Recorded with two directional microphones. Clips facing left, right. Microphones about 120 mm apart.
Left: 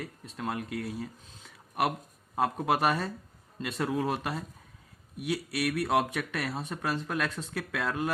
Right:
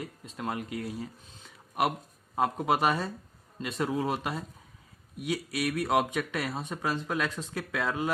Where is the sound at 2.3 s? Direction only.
15° right (ahead or behind).